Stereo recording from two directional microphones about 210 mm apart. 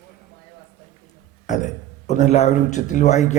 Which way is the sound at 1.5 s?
35° left (ahead or behind).